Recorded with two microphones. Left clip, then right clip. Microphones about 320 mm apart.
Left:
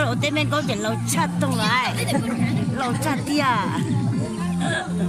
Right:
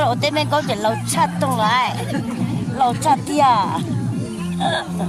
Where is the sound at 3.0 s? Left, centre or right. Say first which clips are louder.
Right 6 dB; centre.